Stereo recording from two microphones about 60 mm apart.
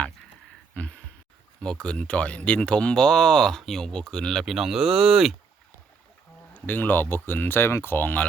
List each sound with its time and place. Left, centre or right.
0.7 s a sound: left
1.6 s speech: centre
4.4 s speech: centre
6.5 s speech: left